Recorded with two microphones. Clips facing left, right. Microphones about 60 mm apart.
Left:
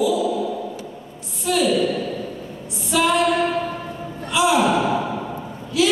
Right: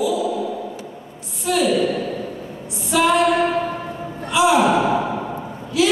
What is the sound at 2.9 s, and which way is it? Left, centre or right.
Female singing, right.